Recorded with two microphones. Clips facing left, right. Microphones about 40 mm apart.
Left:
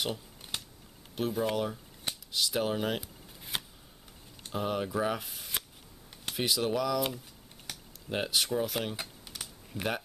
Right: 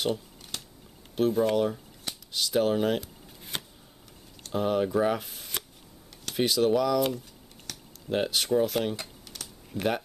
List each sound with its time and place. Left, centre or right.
0.5 s typing: centre
1.1 s speech: centre
7.7 s a sound: centre
8.1 s speech: centre
9.3 s computer keyboard: centre
9.7 s speech: centre